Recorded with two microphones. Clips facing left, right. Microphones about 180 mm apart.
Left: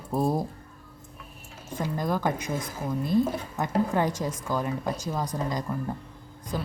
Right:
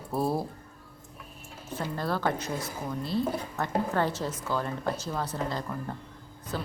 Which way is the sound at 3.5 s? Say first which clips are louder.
Left 4 dB; 15° left (ahead or behind).